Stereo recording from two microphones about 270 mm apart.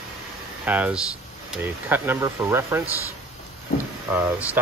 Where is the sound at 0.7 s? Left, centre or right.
Centre.